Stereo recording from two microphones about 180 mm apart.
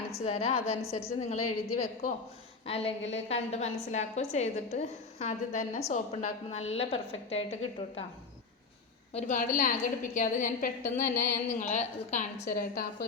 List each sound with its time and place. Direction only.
0.1 s a woman's voice: 35° left (ahead or behind)
9.1 s a woman's voice: 45° left (ahead or behind)
11.2 s a woman's voice: 15° left (ahead or behind)
11.7 s a woman's voice: 40° left (ahead or behind)